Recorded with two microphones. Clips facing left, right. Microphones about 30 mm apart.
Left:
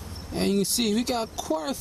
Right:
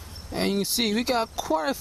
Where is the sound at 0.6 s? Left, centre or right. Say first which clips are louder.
Even; centre.